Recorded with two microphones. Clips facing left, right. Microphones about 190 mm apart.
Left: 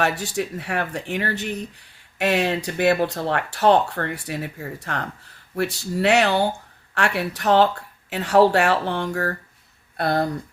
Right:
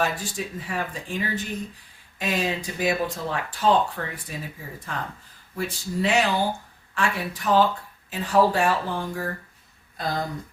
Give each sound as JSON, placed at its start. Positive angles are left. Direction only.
{"t": 0.0, "sound": "speech", "side_deg": 70}